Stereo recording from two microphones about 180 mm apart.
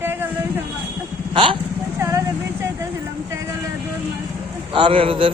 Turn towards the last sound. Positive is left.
turn(degrees=-30)  # may be behind; listen again after turning